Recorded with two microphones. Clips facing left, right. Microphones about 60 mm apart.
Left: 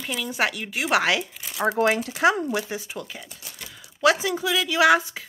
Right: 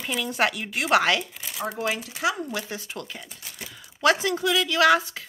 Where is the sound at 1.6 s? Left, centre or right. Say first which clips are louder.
Left 7 dB; left.